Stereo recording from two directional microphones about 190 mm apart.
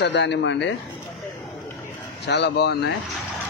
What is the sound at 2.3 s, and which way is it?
Speech, 65° left (ahead or behind).